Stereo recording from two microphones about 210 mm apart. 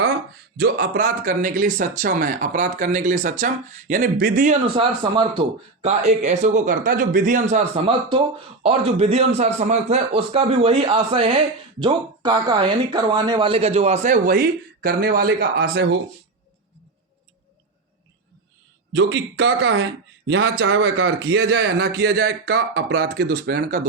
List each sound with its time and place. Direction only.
0.5 s a man's voice: 45° right (ahead or behind)
18.9 s speech: 55° right (ahead or behind)
21.2 s speech: 55° right (ahead or behind)